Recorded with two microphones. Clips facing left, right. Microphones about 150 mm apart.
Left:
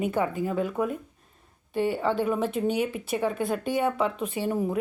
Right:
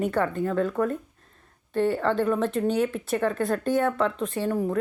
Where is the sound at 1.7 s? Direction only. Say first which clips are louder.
Right 2 dB; 5° left (ahead or behind).